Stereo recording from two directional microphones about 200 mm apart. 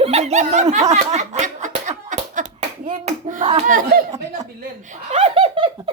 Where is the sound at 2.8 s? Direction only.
40° right (ahead or behind).